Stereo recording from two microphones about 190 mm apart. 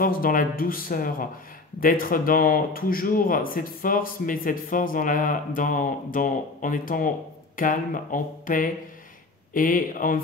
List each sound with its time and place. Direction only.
0.0 s speech: 45° left (ahead or behind)